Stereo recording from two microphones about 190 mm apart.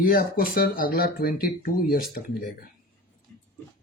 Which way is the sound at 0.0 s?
50° left (ahead or behind).